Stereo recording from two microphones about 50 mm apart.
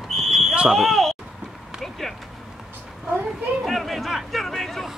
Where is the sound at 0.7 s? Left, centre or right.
Centre.